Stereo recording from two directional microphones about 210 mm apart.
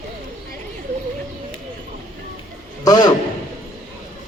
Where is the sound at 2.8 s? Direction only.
20° left (ahead or behind).